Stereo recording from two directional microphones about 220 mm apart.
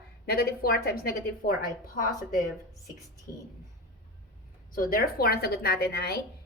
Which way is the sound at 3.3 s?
40° left (ahead or behind).